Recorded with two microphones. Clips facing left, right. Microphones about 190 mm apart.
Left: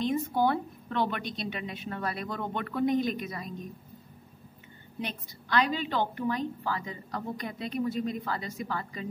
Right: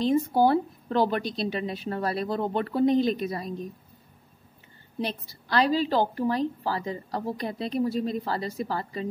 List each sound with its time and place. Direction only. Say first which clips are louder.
0.0 s a woman's voice: right 5 dB; 35° right (ahead or behind)
4.9 s a woman's voice: right 6 dB; 35° right (ahead or behind)